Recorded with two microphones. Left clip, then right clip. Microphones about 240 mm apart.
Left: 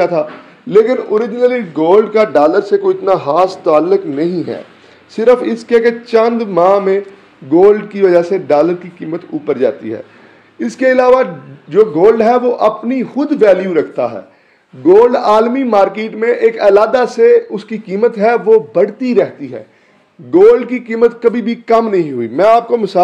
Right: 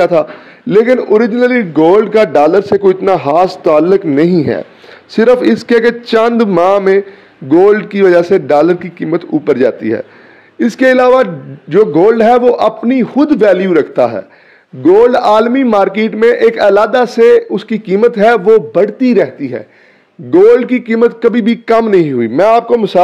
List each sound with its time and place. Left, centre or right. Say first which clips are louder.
0.0 s a man's voice: right 4 dB; right